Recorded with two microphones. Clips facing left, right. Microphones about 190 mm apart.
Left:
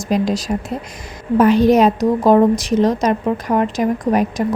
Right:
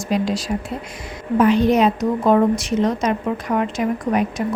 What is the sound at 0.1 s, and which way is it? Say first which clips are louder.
A woman's voice: left 3 dB; 40° left (ahead or behind).